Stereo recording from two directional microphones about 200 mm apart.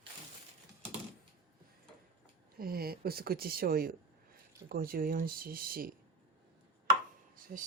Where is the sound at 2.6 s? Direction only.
50° right (ahead or behind).